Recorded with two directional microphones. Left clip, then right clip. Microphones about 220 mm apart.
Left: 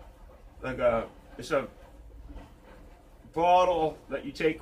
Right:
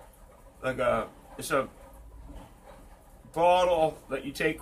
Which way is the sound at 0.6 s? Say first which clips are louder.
Even; 25° right (ahead or behind).